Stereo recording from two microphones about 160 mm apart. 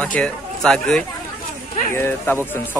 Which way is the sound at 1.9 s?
15° left (ahead or behind).